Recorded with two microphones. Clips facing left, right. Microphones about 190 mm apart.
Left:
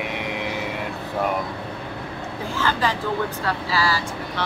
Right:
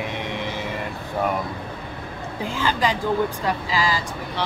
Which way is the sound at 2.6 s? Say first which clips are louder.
Right 1 dB; 15° right (ahead or behind).